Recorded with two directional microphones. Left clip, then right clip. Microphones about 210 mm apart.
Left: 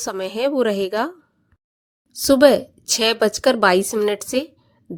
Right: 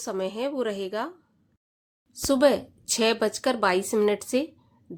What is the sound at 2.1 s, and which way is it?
A woman's voice, 30° left (ahead or behind).